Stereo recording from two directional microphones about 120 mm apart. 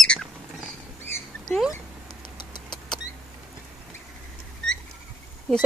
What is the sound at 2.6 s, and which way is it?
Vehicle, 40° left (ahead or behind).